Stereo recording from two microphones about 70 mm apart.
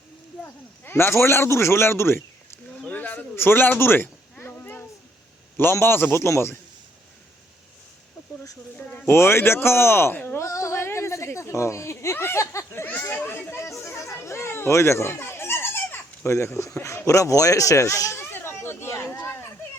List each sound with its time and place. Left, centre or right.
0.4 s speech: left
2.8 s a sound: left
5.7 s speech: left
8.8 s a man's voice: left
13.6 s chatter: left
17.1 s speech: left
18.2 s a sound: left